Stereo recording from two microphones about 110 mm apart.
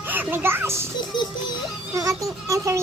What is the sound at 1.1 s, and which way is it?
Music, 45° left (ahead or behind).